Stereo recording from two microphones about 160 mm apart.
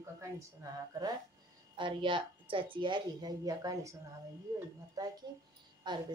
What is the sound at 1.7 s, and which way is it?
A woman's voice, 30° right (ahead or behind).